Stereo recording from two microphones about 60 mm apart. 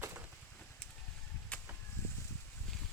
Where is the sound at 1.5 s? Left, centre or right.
Left.